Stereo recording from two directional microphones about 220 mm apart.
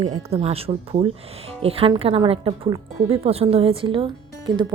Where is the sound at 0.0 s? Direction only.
25° right (ahead or behind).